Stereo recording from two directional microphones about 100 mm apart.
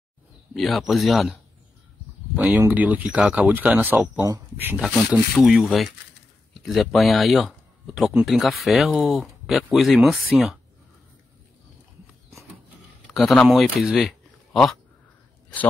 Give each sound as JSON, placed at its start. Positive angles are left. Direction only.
{"t": 0.6, "sound": "speech", "side_deg": 0}
{"t": 2.3, "sound": "speech", "side_deg": -15}
{"t": 13.0, "sound": "speech", "side_deg": 0}